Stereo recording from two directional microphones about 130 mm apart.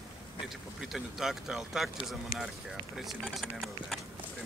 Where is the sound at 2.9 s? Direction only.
Centre (ahead or behind).